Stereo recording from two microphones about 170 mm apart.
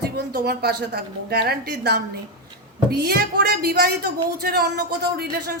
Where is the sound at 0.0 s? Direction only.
70° right (ahead or behind).